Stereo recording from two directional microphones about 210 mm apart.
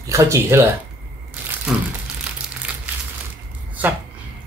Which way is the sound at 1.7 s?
Centre (ahead or behind).